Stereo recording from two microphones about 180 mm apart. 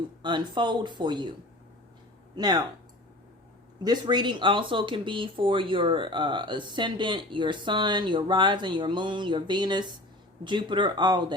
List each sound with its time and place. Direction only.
0.2 s speech: 25° right (ahead or behind)
2.3 s speech: 20° right (ahead or behind)
3.8 s speech: 25° right (ahead or behind)